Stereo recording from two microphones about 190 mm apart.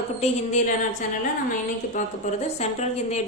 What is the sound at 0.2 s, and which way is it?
Speech, 40° left (ahead or behind).